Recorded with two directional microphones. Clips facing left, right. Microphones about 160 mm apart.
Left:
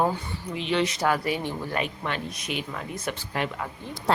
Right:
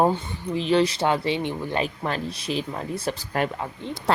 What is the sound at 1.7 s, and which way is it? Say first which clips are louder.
Speech: right 4 dB; 35° right (ahead or behind).